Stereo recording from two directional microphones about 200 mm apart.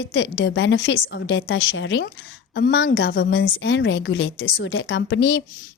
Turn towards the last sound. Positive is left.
turn(degrees=60)  # may be behind; listen again after turning